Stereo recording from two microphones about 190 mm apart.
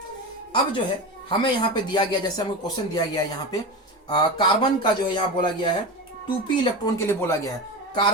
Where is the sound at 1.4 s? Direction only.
25° left (ahead or behind).